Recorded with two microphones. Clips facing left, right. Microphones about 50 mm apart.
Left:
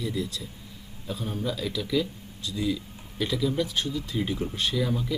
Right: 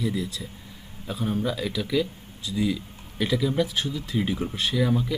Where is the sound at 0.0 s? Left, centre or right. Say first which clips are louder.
Right 2 dB; centre.